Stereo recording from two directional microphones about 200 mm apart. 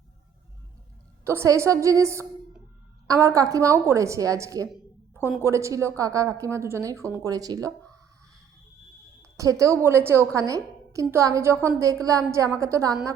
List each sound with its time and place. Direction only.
1.2 s a woman's voice: 15° right (ahead or behind)
4.7 s a woman's voice: 5° right (ahead or behind)
9.2 s a woman's voice: 15° right (ahead or behind)